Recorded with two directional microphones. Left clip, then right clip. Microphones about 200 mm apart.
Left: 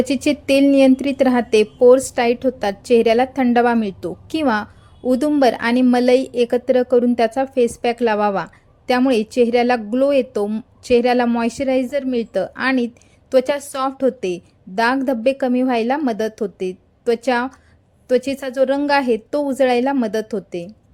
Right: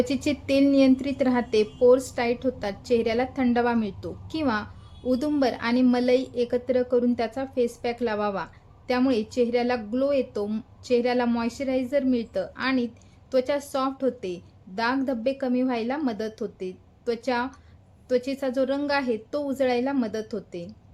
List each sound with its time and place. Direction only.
0.0 s a woman's voice: 30° left (ahead or behind)